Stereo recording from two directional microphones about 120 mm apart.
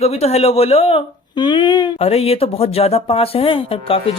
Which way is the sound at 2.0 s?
55° left (ahead or behind).